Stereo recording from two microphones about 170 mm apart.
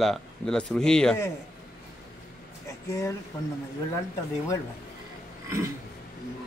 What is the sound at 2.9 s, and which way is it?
Speech, 15° left (ahead or behind).